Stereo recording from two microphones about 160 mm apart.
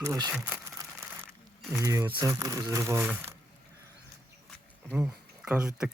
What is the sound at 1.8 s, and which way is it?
Speech, 20° right (ahead or behind).